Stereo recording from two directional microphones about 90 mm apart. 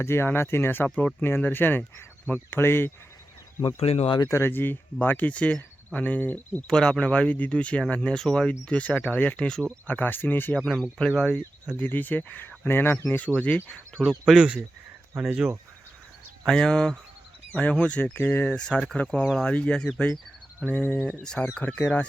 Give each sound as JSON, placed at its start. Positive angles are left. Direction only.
{"t": 0.0, "sound": "speech", "side_deg": 25}
{"t": 3.8, "sound": "speech", "side_deg": 90}
{"t": 4.3, "sound": "speech", "side_deg": 25}
{"t": 9.8, "sound": "speech", "side_deg": 20}
{"t": 10.6, "sound": "speech", "side_deg": 0}
{"t": 11.8, "sound": "speech", "side_deg": 20}
{"t": 14.0, "sound": "speech", "side_deg": -5}
{"t": 16.5, "sound": "speech", "side_deg": 5}
{"t": 19.2, "sound": "speech", "side_deg": 0}
{"t": 19.5, "sound": "speech", "side_deg": 15}